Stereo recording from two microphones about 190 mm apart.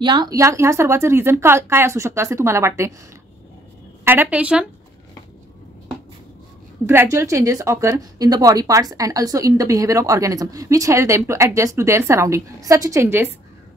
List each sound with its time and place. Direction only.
0.0 s a woman's voice: 25° right (ahead or behind)
4.0 s a woman's voice: 10° right (ahead or behind)
6.9 s a woman's voice: 15° right (ahead or behind)